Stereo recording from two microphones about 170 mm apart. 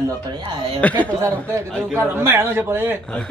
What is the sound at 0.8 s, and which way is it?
Speech, 10° left (ahead or behind).